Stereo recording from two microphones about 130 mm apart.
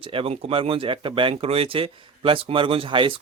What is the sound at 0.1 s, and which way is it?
Speech, 45° right (ahead or behind).